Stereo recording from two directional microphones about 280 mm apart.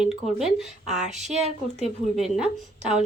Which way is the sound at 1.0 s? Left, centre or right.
Right.